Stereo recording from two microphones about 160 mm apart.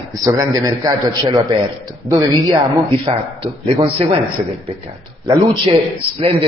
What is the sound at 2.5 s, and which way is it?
A man's voice, 25° right (ahead or behind).